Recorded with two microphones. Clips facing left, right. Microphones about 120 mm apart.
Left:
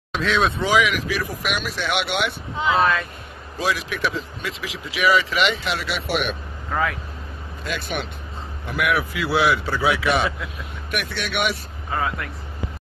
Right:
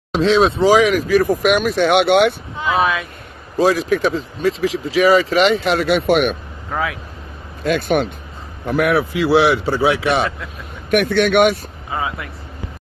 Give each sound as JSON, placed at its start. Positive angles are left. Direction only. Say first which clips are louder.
{"t": 0.1, "sound": "speech", "louder": "right 7 dB", "side_deg": -30}
{"t": 2.7, "sound": "speech", "louder": "right 2 dB", "side_deg": -10}
{"t": 3.5, "sound": "speech", "louder": "right 10 dB", "side_deg": -40}
{"t": 6.7, "sound": "speech", "louder": "right 1 dB", "side_deg": -5}
{"t": 7.6, "sound": "speech", "louder": "right 11 dB", "side_deg": -50}
{"t": 8.6, "sound": "speech", "louder": "right 7 dB", "side_deg": -35}
{"t": 10.9, "sound": "speech", "louder": "right 14 dB", "side_deg": -55}
{"t": 11.9, "sound": "speech", "louder": "right 1 dB", "side_deg": -5}